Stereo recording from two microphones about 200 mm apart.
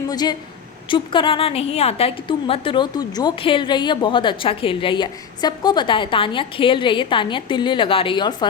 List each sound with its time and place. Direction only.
0.1 s a woman's voice: 20° left (ahead or behind)